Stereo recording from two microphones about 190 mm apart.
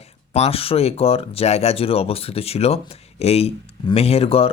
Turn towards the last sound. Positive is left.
turn(degrees=30)  # may be behind; listen again after turning